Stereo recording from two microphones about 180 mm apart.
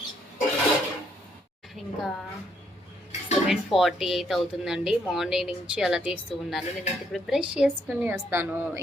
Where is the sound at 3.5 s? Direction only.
Centre (ahead or behind).